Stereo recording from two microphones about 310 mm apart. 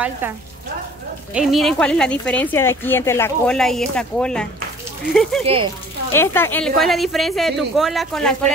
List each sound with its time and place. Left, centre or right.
1.3 s speech: centre
5.4 s speech: centre
6.1 s speech: centre